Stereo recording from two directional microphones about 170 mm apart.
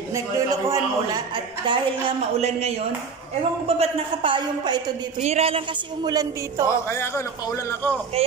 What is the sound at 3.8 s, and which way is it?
A woman's voice, 30° right (ahead or behind).